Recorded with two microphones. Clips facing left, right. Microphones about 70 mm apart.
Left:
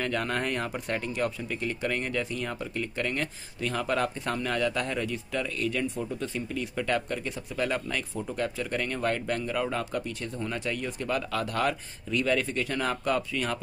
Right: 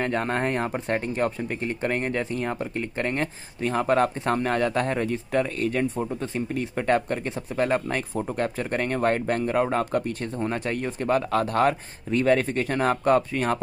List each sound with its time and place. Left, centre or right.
0.0 s speech: right